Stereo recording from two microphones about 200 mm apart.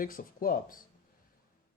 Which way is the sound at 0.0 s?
45° left (ahead or behind).